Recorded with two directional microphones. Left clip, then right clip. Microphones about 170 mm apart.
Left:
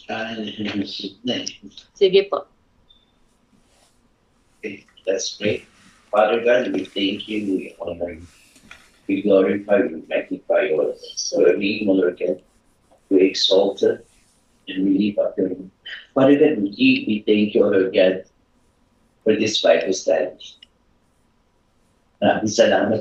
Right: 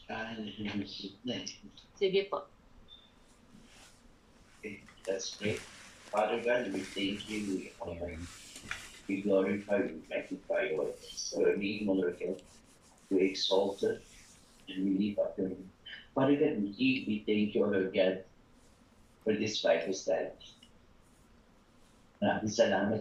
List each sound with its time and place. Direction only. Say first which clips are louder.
0.0 s speech: left 13 dB; 60° left (ahead or behind)
4.6 s speech: left 14 dB; 60° left (ahead or behind)
7.8 s speech: left 13 dB; 90° left
9.0 s speech: left 14 dB; 65° left (ahead or behind)
19.2 s speech: left 14 dB; 60° left (ahead or behind)
22.2 s speech: left 13 dB; 65° left (ahead or behind)